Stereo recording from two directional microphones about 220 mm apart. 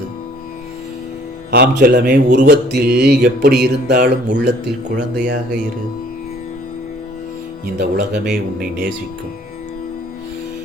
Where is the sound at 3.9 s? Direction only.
35° right (ahead or behind).